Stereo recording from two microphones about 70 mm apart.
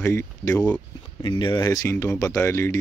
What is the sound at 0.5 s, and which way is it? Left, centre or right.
Speech, centre.